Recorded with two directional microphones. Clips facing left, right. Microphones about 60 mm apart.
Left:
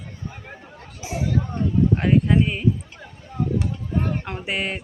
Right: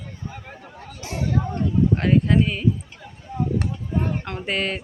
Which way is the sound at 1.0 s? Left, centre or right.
Centre.